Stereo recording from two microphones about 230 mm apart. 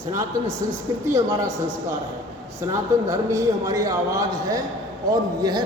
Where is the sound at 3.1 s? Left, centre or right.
Centre.